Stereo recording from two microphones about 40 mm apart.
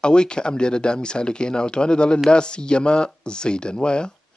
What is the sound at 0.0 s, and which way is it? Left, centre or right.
Speech, left.